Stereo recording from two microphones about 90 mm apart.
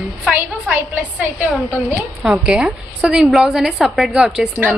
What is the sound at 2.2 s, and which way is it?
A woman's voice, 10° right (ahead or behind).